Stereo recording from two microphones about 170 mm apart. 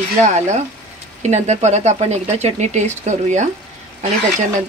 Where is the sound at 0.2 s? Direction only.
40° right (ahead or behind).